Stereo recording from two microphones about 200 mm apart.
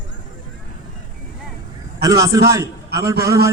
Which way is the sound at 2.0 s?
15° right (ahead or behind).